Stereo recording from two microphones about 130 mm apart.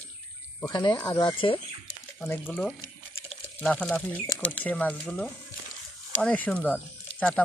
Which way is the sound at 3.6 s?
5° left (ahead or behind).